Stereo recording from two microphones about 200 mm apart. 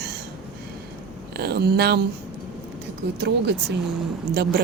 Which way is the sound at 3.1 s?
55° right (ahead or behind).